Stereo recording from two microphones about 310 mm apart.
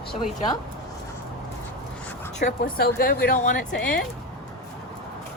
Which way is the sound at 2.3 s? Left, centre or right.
Left.